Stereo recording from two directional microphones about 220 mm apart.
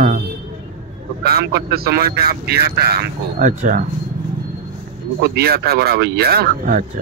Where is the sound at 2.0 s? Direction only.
35° left (ahead or behind).